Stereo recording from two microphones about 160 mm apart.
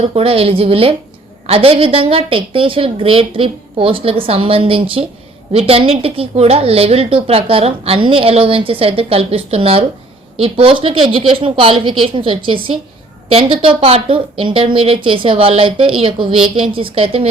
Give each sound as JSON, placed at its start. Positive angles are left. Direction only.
{"t": 0.0, "sound": "a woman's voice", "side_deg": -40}